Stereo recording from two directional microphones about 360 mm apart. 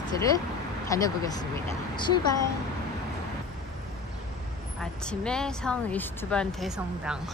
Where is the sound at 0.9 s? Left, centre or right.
Centre.